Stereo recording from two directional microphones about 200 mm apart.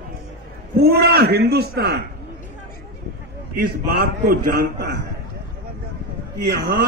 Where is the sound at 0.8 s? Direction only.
50° right (ahead or behind).